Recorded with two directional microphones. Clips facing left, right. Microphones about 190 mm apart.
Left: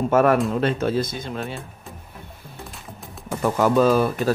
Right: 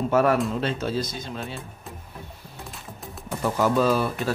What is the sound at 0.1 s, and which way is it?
Speech, 50° left (ahead or behind).